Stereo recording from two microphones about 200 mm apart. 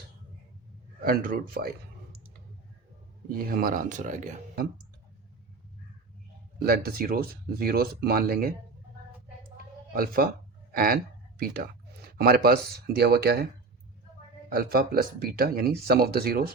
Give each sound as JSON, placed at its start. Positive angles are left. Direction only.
{"t": 1.0, "sound": "speech", "side_deg": -45}
{"t": 3.3, "sound": "speech", "side_deg": -45}
{"t": 6.6, "sound": "speech", "side_deg": -50}
{"t": 9.9, "sound": "speech", "side_deg": -45}
{"t": 10.7, "sound": "a sound", "side_deg": -45}
{"t": 13.0, "sound": "speech", "side_deg": -50}
{"t": 14.5, "sound": "speech", "side_deg": -50}